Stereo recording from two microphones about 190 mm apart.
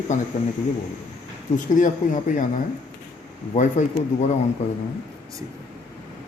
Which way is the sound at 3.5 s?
40° left (ahead or behind).